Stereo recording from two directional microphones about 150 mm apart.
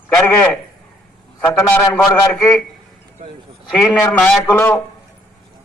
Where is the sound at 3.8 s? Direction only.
Centre (ahead or behind).